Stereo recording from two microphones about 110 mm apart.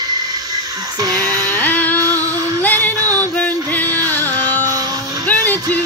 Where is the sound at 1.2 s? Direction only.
15° left (ahead or behind).